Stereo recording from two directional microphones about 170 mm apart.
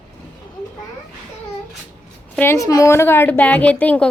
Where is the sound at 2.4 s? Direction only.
15° left (ahead or behind).